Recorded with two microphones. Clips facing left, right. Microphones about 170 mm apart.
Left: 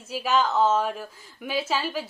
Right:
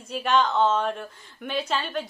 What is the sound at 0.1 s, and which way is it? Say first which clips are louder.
Speech: right 1 dB; 5° left (ahead or behind).